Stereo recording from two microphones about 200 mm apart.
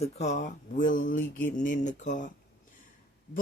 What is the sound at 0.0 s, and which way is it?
Speech, 35° left (ahead or behind).